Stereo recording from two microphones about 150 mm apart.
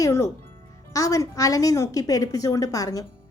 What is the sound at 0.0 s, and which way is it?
A woman's voice, 20° left (ahead or behind).